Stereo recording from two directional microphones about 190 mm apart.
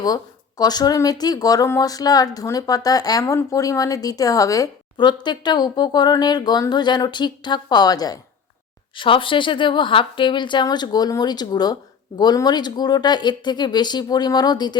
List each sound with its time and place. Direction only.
0.0 s speech: 20° left (ahead or behind)